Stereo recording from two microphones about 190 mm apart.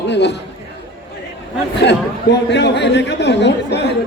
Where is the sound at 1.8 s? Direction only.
65° left (ahead or behind).